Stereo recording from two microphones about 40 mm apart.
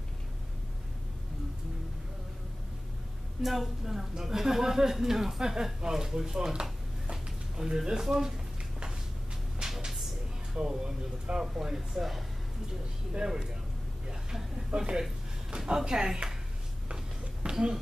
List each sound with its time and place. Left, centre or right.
3.4 s speech: centre
6.5 s a sound: centre
9.6 s music: centre
10.5 s speech: centre
13.1 s speech: centre
14.7 s speech: centre
16.9 s a sound: centre